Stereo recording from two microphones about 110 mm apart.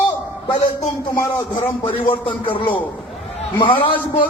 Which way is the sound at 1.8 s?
50° left (ahead or behind).